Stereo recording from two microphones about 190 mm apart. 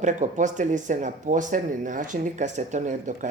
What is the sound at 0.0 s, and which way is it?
Speech, 40° right (ahead or behind).